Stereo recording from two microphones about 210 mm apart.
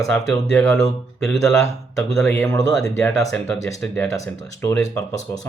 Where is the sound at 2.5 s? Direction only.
15° left (ahead or behind).